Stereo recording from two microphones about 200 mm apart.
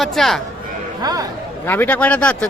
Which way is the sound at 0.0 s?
Centre (ahead or behind).